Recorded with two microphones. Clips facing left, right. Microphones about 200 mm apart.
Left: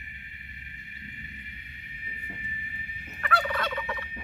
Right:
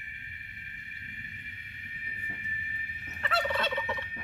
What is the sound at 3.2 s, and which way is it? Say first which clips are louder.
Fowl: left 1 dB; 25° right (ahead or behind).